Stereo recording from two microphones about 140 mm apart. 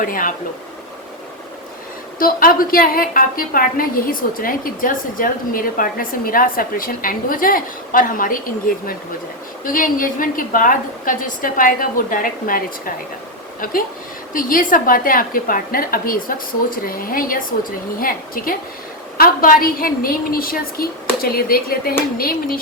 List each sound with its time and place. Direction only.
0.0 s speech: 70° left (ahead or behind)
2.1 s a woman's voice: 90° left
9.6 s a woman's voice: 85° left
14.3 s a woman's voice: 85° left